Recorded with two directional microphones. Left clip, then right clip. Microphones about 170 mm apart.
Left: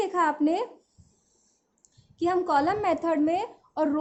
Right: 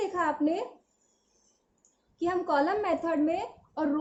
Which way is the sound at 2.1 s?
45° left (ahead or behind).